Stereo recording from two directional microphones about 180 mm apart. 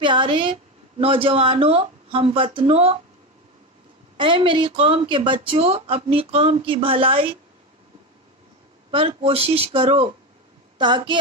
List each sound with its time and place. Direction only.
0.0 s speech: 25° right (ahead or behind)
4.2 s speech: 30° right (ahead or behind)
8.9 s a woman's voice: 30° right (ahead or behind)